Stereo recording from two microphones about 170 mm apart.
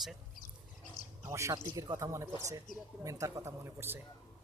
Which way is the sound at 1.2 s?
15° right (ahead or behind).